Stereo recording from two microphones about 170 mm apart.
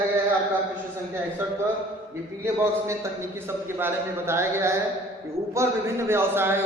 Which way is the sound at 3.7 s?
15° right (ahead or behind).